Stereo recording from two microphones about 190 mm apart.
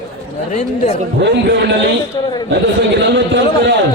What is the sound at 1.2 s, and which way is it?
Speech, 65° right (ahead or behind).